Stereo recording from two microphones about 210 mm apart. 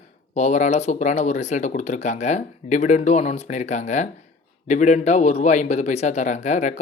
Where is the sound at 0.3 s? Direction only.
35° left (ahead or behind).